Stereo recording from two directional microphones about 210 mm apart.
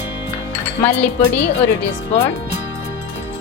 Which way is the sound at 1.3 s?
50° left (ahead or behind).